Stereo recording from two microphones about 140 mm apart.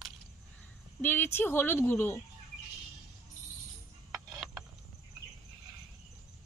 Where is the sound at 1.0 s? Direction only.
15° left (ahead or behind).